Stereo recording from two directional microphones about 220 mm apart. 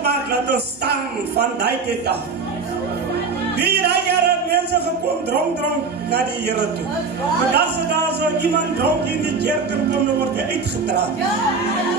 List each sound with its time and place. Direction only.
0.0 s speech: 50° right (ahead or behind)
3.5 s music: 50° right (ahead or behind)
7.5 s speech: 50° right (ahead or behind)